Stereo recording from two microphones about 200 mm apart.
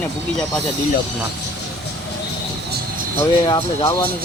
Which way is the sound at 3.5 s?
25° left (ahead or behind).